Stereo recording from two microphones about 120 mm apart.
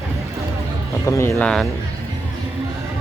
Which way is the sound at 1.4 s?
5° left (ahead or behind).